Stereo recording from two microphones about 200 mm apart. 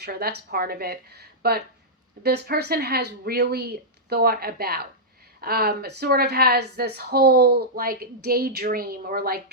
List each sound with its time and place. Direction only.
0.0 s a woman's voice: 50° right (ahead or behind)